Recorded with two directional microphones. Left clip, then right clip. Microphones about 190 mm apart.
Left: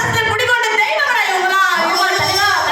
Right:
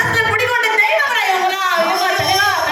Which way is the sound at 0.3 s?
20° left (ahead or behind).